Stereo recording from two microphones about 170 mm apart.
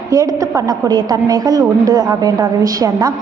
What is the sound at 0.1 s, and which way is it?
A woman's voice, 20° right (ahead or behind).